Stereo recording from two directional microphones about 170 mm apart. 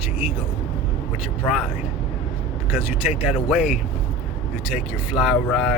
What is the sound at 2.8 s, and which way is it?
Speech, 35° left (ahead or behind).